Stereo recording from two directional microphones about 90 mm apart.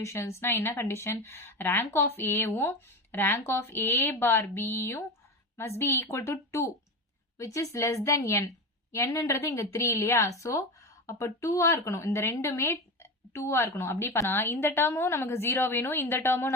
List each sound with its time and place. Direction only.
0.0 s a woman's voice: 30° left (ahead or behind)